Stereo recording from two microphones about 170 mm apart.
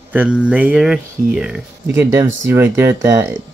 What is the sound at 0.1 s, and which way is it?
Speech, 5° right (ahead or behind).